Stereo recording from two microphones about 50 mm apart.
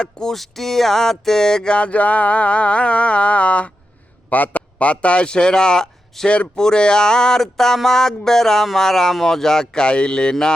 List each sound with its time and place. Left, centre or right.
0.0 s a man's voice: centre
0.3 s a sound: centre; by 3.7 s left
4.3 s a man's voice: left; by 10.5 s centre